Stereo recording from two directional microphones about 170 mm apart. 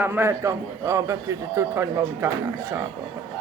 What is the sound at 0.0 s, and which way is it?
Speech, 10° right (ahead or behind).